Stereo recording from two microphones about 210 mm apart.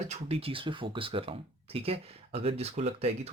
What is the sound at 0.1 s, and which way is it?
Speech, 30° right (ahead or behind).